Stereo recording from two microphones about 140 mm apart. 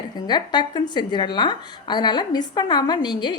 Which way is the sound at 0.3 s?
30° left (ahead or behind).